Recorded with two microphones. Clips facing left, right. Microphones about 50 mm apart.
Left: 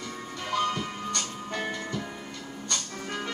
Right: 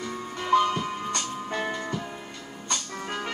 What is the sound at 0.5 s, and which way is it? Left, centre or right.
Music, centre.